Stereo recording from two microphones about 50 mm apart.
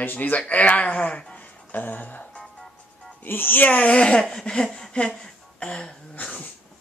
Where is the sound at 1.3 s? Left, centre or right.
Left.